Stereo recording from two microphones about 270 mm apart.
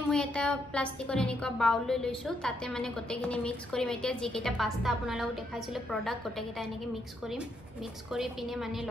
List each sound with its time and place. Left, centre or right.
0.1 s a woman's voice: centre
8.1 s a woman's voice: centre